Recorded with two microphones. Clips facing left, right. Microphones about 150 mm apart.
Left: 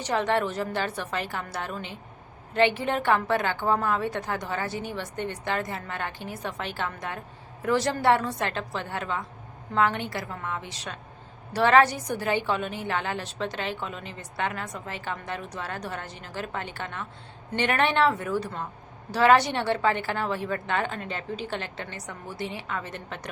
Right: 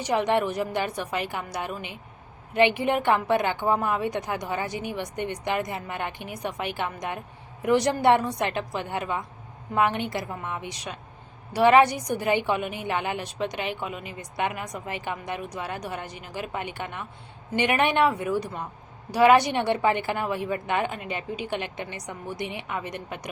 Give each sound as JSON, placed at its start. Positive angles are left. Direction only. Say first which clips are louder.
{"t": 0.0, "sound": "a woman's voice", "louder": "right 2 dB", "side_deg": -15}